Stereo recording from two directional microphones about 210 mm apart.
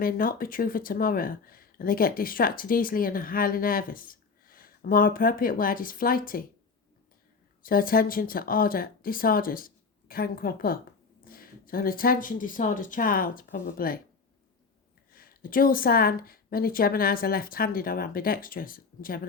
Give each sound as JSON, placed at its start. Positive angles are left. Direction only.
{"t": 0.0, "sound": "speech", "side_deg": 45}
{"t": 7.6, "sound": "speech", "side_deg": 45}
{"t": 15.1, "sound": "speech", "side_deg": 45}